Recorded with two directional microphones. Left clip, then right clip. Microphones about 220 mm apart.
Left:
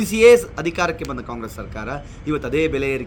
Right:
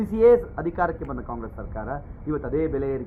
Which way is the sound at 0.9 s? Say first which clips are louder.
Left 5 dB; 40° left (ahead or behind).